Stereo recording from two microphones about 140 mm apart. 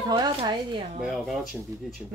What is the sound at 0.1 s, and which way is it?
Speech, 35° right (ahead or behind).